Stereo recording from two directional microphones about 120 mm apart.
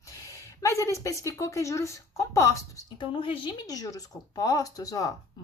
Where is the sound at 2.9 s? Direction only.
45° left (ahead or behind).